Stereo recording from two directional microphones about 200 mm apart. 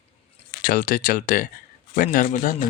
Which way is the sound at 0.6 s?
45° left (ahead or behind).